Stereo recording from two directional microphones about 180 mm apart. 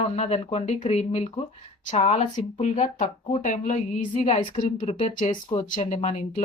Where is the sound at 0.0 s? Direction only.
35° left (ahead or behind).